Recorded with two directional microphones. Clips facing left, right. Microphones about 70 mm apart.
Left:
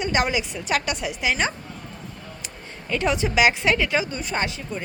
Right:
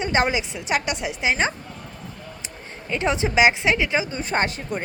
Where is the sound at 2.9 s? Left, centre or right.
Right.